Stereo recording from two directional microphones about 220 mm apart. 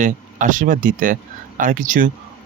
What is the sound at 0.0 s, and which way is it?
Speech, 35° right (ahead or behind).